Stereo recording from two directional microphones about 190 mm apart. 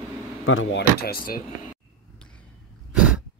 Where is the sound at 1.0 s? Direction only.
50° left (ahead or behind).